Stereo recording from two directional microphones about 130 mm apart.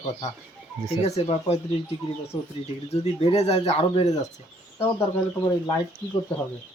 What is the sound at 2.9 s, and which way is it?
Speech, 50° left (ahead or behind).